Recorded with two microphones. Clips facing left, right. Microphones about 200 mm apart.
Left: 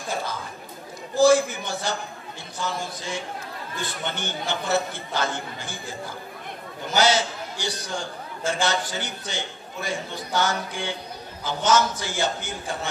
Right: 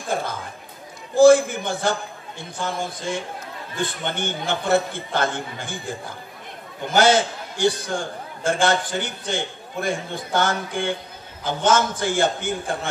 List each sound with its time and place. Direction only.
0.1 s chatter: 50° right (ahead or behind)
1.1 s a man's voice: 55° right (ahead or behind)